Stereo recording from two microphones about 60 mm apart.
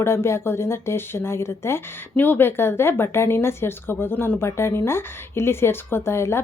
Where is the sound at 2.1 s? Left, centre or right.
Left.